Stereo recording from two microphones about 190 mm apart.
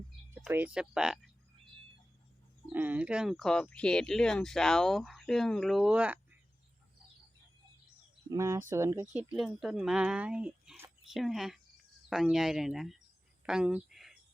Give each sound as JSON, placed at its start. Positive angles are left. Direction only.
{"t": 0.4, "sound": "speech", "side_deg": -5}
{"t": 2.6, "sound": "speech", "side_deg": -10}
{"t": 8.3, "sound": "speech", "side_deg": -15}
{"t": 9.3, "sound": "speech", "side_deg": 0}
{"t": 13.4, "sound": "a sound", "side_deg": -5}